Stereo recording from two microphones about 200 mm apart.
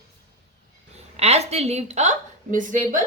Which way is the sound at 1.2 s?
30° right (ahead or behind).